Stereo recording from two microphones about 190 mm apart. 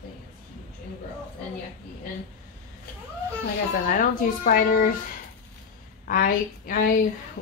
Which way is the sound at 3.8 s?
45° left (ahead or behind).